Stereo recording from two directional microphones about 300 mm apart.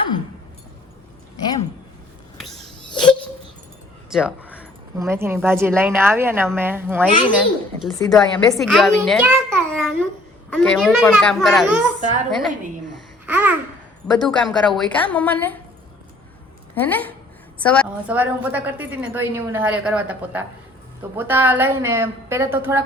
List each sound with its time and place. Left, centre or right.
2.9 s a sound: centre
4.1 s a woman's voice: centre
13.2 s a woman's voice: centre
16.7 s a woman's voice: centre